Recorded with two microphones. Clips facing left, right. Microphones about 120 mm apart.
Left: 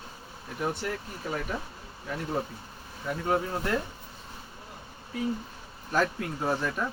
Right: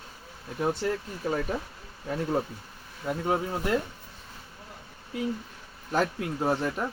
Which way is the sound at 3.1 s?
20° right (ahead or behind).